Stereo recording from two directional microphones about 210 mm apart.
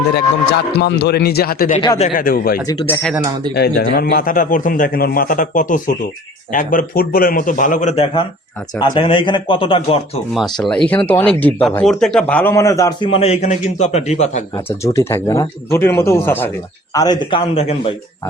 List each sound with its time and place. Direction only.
0.5 s a man's voice: 50° left (ahead or behind)
2.6 s a man's voice: 15° left (ahead or behind)
3.5 s a man's voice: 50° left (ahead or behind); by 10.0 s 25° left (ahead or behind)
10.3 s a man's voice: centre (ahead or behind)
13.1 s a man's voice: 30° left (ahead or behind)
14.5 s a man's voice: 10° left (ahead or behind); by 17.9 s 30° left (ahead or behind)